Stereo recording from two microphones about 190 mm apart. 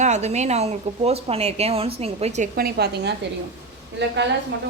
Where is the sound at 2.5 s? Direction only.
55° right (ahead or behind).